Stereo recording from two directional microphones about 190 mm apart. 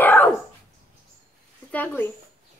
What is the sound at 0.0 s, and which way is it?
Dog, 10° left (ahead or behind).